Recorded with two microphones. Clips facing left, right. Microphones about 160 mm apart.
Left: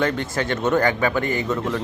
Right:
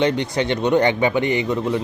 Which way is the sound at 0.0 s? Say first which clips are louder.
Right 3 dB; 20° right (ahead or behind).